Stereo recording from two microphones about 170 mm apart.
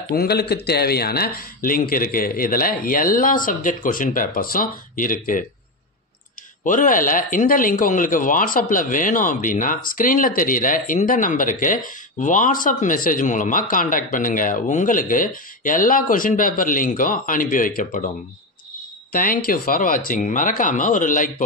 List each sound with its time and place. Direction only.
0.1 s a man's voice: 65° left (ahead or behind)
6.6 s speech: 50° left (ahead or behind)
19.1 s speech: 55° left (ahead or behind)